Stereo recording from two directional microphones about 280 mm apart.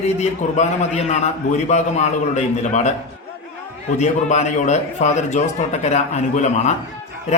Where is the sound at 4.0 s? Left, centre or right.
Left.